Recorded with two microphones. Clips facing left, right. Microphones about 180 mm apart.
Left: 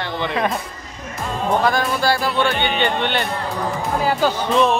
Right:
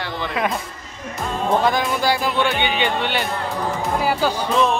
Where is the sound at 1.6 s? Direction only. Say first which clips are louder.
Left 1 dB; 15° right (ahead or behind).